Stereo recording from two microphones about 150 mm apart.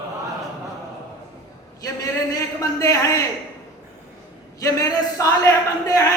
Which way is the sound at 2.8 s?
20° left (ahead or behind).